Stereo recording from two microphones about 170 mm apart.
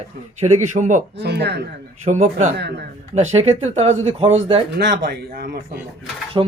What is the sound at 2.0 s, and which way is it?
Speech, 40° right (ahead or behind).